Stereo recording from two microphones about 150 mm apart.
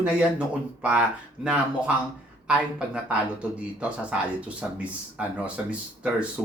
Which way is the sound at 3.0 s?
10° right (ahead or behind).